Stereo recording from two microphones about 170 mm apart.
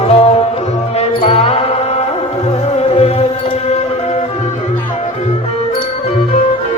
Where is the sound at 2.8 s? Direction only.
35° left (ahead or behind).